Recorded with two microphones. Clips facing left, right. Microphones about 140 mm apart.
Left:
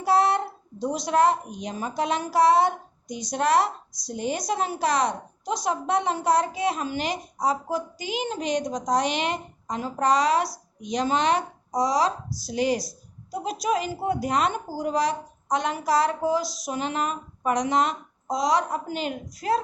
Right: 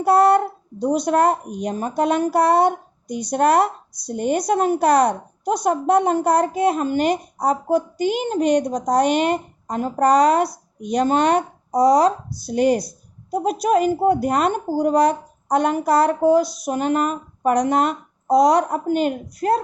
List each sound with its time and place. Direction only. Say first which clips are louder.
0.0 s a woman's voice: right 7 dB; 55° right (ahead or behind)